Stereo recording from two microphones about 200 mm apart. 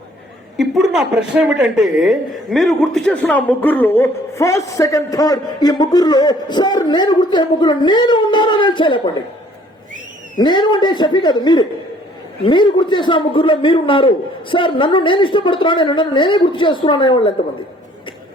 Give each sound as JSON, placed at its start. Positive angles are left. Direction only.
{"t": 0.5, "sound": "a woman's voice", "side_deg": 0}
{"t": 10.3, "sound": "a man's voice", "side_deg": 20}